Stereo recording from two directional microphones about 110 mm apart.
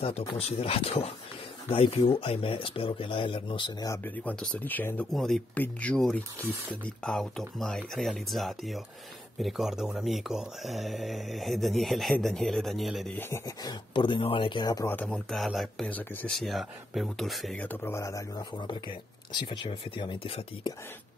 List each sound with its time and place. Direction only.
0.4 s speech: 65° left (ahead or behind); by 3.7 s 50° left (ahead or behind)
4.0 s speech: 15° left (ahead or behind)
5.1 s speech: 5° left (ahead or behind)
13.2 s speech: 25° left (ahead or behind)
13.6 s speech: 40° left (ahead or behind)
14.9 s speech: 10° left (ahead or behind)
15.9 s speech: 15° left (ahead or behind)
16.3 s speech: centre (ahead or behind)
17.6 s speech: 15° left (ahead or behind); by 20.3 s 50° left (ahead or behind)